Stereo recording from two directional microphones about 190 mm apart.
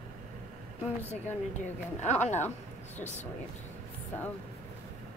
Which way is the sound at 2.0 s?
40° left (ahead or behind).